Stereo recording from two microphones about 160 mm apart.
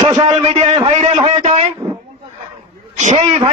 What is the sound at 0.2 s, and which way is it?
Speech, 40° right (ahead or behind).